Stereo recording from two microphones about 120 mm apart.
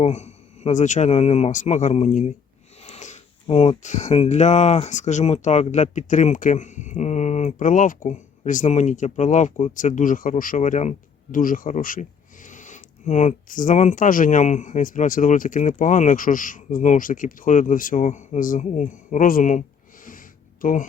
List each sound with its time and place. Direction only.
0.0 s a man's voice: 70° left (ahead or behind)
2.8 s wheeze: 75° left (ahead or behind)
3.4 s speech: 55° left (ahead or behind); by 10.9 s 80° left
11.5 s speech: 90° left